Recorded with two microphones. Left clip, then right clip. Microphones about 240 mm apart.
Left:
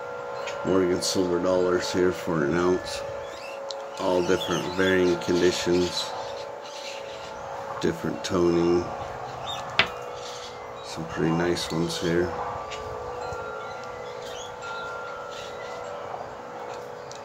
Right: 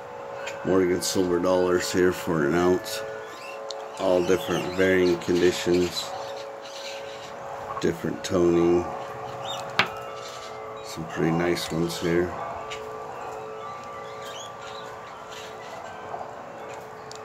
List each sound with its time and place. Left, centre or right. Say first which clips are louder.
0.7 s speech: right 1 dB; centre
4.0 s speech: right 2 dB; centre
7.8 s speech: even; centre
11.1 s speech: right 1 dB; centre